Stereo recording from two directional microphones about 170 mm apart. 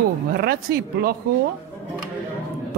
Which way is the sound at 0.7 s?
60° right (ahead or behind).